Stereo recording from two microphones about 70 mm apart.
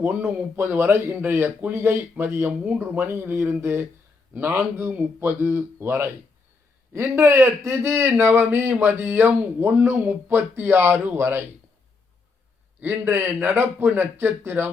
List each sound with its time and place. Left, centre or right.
0.0 s speech: right
12.8 s speech: right